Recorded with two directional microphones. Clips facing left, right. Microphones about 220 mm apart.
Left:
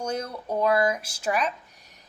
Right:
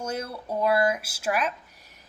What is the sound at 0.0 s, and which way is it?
A woman's voice, 5° right (ahead or behind).